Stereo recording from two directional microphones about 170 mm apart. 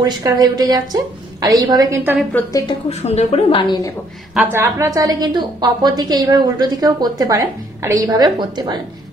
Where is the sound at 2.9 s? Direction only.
40° left (ahead or behind).